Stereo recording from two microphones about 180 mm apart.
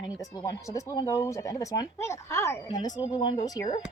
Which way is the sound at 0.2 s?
20° left (ahead or behind).